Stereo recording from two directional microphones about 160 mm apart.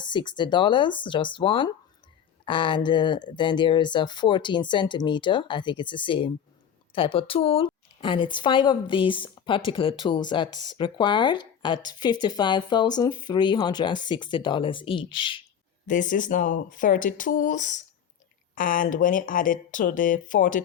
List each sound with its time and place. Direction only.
0.0 s a woman's voice: 30° left (ahead or behind)
15.9 s speech: 55° left (ahead or behind)